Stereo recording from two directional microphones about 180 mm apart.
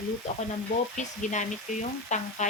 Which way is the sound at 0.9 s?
40° left (ahead or behind).